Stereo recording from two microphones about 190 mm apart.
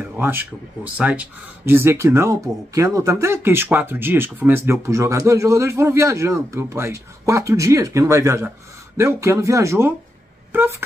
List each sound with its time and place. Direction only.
0.2 s speech: 10° right (ahead or behind)